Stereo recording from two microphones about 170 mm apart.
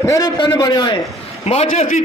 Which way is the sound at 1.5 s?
45° left (ahead or behind).